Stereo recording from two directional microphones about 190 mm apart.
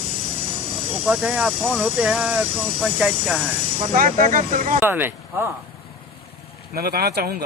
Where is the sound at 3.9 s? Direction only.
45° right (ahead or behind).